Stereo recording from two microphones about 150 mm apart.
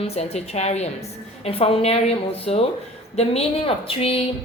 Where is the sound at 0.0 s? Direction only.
45° left (ahead or behind).